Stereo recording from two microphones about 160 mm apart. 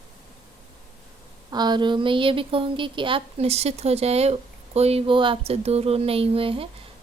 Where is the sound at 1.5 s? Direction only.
25° right (ahead or behind).